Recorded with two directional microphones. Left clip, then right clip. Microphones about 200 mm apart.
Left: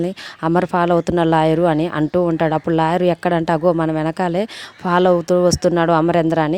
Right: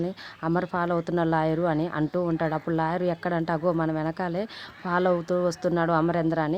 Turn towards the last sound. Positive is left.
turn(degrees=40)  # may be behind; listen again after turning